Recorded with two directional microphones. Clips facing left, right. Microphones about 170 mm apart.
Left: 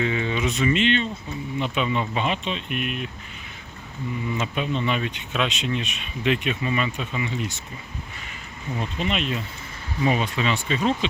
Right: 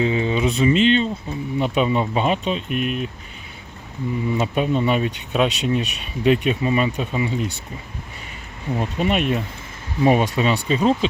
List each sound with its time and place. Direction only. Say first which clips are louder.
0.0 s speech: right 5 dB; 30° right (ahead or behind)
4.4 s speech: right 7 dB; 45° right (ahead or behind)
8.7 s speech: right 6 dB; 45° right (ahead or behind)